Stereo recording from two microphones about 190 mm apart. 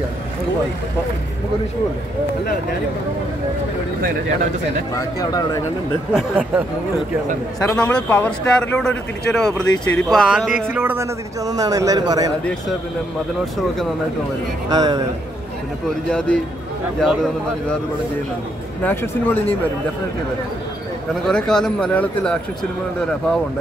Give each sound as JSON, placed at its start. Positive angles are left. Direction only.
{"t": 4.9, "sound": "speech", "side_deg": 20}
{"t": 6.1, "sound": "speech", "side_deg": -10}
{"t": 7.6, "sound": "a man's voice", "side_deg": 5}
{"t": 14.7, "sound": "a man's voice", "side_deg": -20}
{"t": 16.1, "sound": "speech", "side_deg": 5}
{"t": 18.8, "sound": "speech", "side_deg": 10}
{"t": 21.1, "sound": "speech", "side_deg": 5}